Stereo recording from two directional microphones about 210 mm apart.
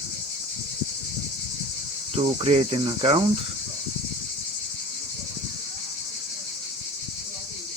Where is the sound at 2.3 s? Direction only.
30° right (ahead or behind).